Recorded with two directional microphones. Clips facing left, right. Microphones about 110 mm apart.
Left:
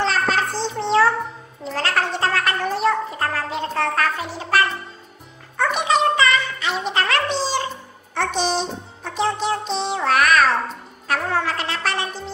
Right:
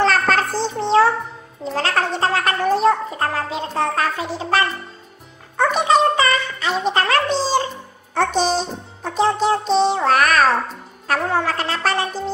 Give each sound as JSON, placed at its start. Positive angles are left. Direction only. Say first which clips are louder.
{"t": 0.0, "sound": "music", "louder": "right 3 dB", "side_deg": -50}
{"t": 1.6, "sound": "music", "louder": "right 2 dB", "side_deg": -30}